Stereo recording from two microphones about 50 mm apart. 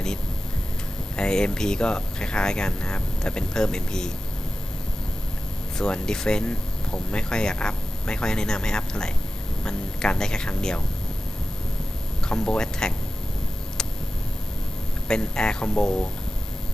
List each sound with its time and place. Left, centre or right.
1.1 s speech: centre
5.7 s speech: centre
12.2 s speech: centre
13.8 s a sound: centre
15.0 s speech: centre